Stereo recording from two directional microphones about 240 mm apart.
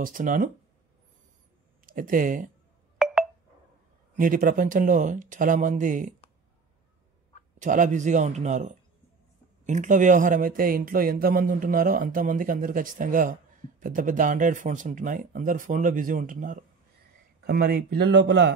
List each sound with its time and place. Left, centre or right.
0.0 s speech: right
1.9 s speech: right
4.1 s speech: right
7.6 s speech: right